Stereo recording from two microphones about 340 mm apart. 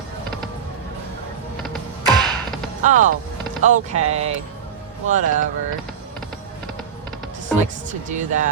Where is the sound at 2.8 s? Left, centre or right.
Right.